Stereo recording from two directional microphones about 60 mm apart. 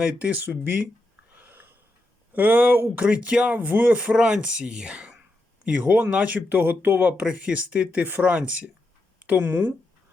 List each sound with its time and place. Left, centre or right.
0.0 s speech: right
1.4 s wheeze: right
2.3 s speech: right
3.9 s speech: centre; by 7.2 s right
7.2 s speech: centre